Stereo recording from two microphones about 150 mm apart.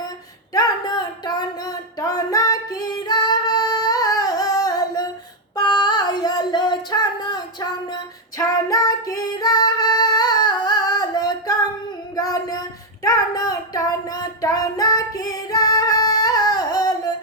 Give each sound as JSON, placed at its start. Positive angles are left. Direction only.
{"t": 0.5, "sound": "a sound", "side_deg": 25}
{"t": 5.5, "sound": "female singing", "side_deg": 30}
{"t": 8.4, "sound": "music", "side_deg": 25}
{"t": 12.1, "sound": "child singing", "side_deg": 25}